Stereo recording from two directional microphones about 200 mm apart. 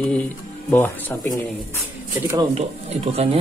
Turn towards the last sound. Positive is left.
turn(degrees=-30)  # may be behind; listen again after turning